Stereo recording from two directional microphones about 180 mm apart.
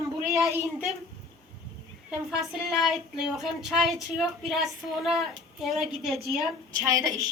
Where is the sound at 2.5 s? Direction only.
Centre (ahead or behind).